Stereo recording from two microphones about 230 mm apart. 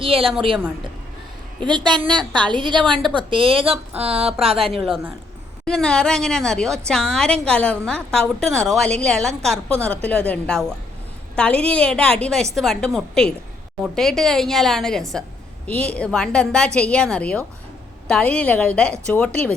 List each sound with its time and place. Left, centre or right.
0.0 s speech: right
1.6 s speech: centre
2.8 s a woman's voice: centre
3.2 s speech: right
4.6 s a woman's voice: centre